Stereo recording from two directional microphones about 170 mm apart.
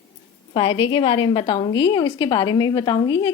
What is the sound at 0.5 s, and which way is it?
A woman's voice, 30° left (ahead or behind).